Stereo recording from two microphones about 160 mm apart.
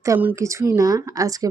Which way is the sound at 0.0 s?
15° right (ahead or behind).